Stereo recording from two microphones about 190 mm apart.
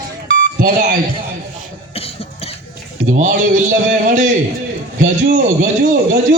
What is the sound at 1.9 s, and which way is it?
Cough, 30° left (ahead or behind).